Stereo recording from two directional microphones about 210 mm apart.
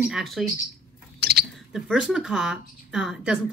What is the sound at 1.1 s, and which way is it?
Chewing, 50° right (ahead or behind).